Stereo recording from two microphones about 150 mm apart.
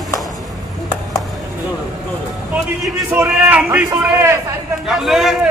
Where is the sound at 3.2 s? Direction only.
5° right (ahead or behind).